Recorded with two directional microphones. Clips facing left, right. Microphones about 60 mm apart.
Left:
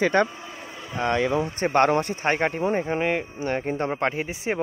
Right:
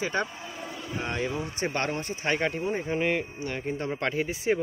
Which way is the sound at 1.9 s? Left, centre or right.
Left.